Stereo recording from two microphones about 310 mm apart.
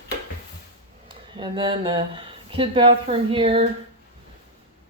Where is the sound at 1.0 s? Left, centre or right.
Centre.